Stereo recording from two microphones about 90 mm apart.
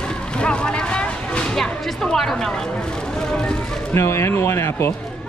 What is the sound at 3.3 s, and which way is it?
Speech, 5° left (ahead or behind).